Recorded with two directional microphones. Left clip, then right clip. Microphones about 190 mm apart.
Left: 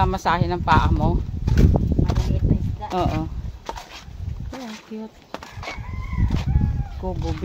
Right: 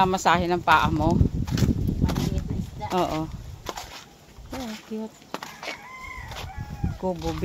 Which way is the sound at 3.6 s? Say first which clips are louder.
Left 2 dB; 30° right (ahead or behind).